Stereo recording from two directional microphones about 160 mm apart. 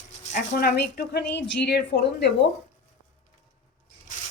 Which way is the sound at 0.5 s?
75° left (ahead or behind).